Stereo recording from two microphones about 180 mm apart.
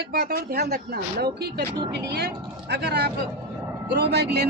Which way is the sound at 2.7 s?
65° right (ahead or behind).